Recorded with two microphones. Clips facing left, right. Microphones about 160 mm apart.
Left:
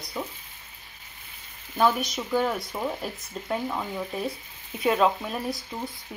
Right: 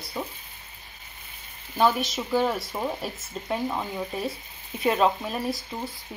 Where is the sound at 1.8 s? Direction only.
Centre (ahead or behind).